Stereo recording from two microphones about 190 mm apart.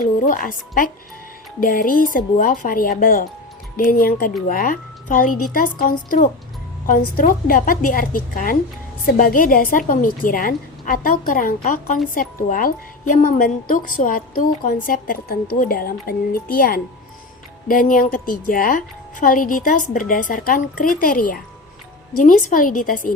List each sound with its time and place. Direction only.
0.3 s a woman's voice: 45° left (ahead or behind)